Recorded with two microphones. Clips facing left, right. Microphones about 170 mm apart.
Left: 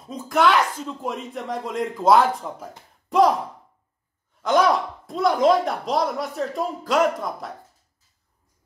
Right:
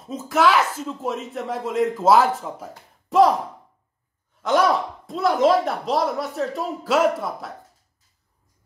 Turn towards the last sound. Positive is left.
turn(degrees=-5)  # may be behind; listen again after turning